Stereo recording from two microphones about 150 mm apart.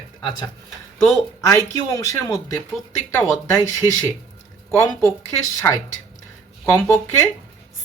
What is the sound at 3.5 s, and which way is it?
Speech, 20° left (ahead or behind).